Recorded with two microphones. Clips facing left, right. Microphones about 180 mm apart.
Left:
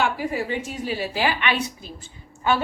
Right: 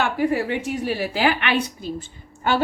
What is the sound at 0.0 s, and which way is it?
Speech, 60° right (ahead or behind).